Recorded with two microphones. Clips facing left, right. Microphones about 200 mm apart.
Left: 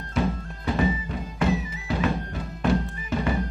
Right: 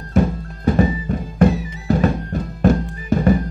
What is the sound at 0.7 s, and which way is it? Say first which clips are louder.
Music: right 7 dB; 45° right (ahead or behind).